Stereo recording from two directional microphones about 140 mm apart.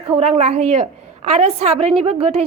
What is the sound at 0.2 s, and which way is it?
A woman's voice, 50° right (ahead or behind).